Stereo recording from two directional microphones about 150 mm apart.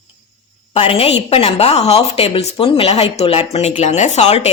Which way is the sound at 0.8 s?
40° left (ahead or behind).